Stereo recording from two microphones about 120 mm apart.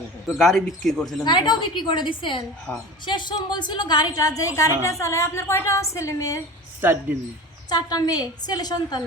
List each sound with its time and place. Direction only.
0.3 s speech: centre (ahead or behind)
1.0 s a woman's voice: 35° left (ahead or behind)
6.8 s speech: 15° right (ahead or behind)
7.7 s a woman's voice: 35° left (ahead or behind)